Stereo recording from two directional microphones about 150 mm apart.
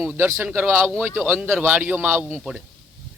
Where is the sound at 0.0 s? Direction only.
15° right (ahead or behind).